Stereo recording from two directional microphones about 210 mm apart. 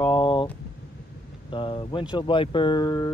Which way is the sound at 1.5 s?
25° left (ahead or behind).